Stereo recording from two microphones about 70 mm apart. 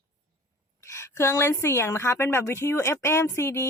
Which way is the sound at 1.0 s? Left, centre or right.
Left.